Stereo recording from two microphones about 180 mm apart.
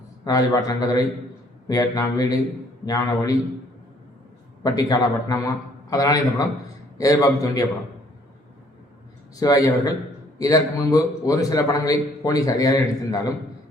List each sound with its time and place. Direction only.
0.3 s a man's voice: 20° left (ahead or behind)
4.6 s a man's voice: 20° left (ahead or behind)
9.3 s a man's voice: 20° left (ahead or behind)